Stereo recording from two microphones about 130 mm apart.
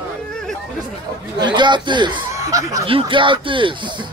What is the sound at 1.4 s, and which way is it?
Speech, 35° right (ahead or behind).